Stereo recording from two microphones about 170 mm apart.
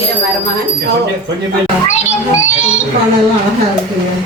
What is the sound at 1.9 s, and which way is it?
Speech, 40° left (ahead or behind).